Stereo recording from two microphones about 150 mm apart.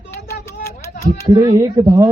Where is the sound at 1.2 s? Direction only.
30° right (ahead or behind).